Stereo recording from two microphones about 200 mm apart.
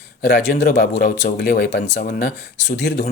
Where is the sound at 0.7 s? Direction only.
45° left (ahead or behind).